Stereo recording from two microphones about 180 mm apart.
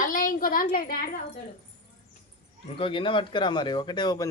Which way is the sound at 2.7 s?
30° left (ahead or behind).